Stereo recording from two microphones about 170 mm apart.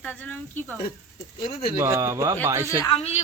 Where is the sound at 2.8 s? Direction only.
35° left (ahead or behind).